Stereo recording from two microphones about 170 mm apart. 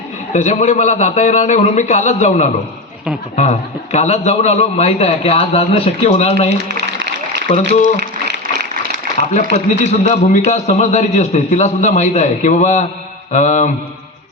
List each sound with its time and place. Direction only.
0.3 s a man's voice: 45° left (ahead or behind)
6.7 s a sound: 80° right
7.5 s a man's voice: 45° left (ahead or behind)
9.8 s a man's voice: 40° left (ahead or behind)